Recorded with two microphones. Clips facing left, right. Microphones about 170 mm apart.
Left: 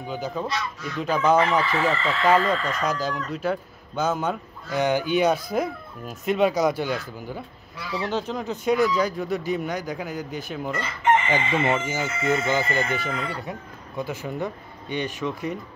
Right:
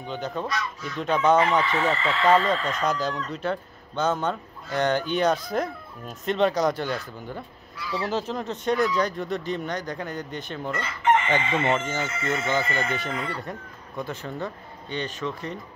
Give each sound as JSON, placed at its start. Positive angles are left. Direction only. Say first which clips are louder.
{"t": 0.0, "sound": "speech", "louder": "left 1 dB", "side_deg": 5}
{"t": 1.6, "sound": "speech", "louder": "left 1 dB", "side_deg": -20}
{"t": 2.2, "sound": "speech", "louder": "even", "side_deg": 5}